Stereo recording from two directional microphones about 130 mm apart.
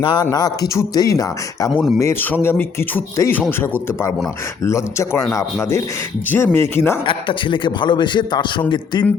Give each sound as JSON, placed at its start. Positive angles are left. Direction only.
{"t": 0.0, "sound": "speech", "side_deg": 35}
{"t": 7.0, "sound": "a man's voice", "side_deg": 40}